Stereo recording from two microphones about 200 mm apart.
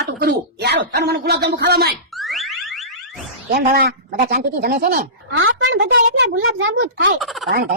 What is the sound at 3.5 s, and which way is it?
Speech, 50° right (ahead or behind).